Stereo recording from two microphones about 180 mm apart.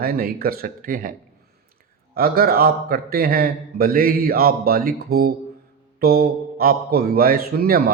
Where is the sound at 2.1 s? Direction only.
60° right (ahead or behind).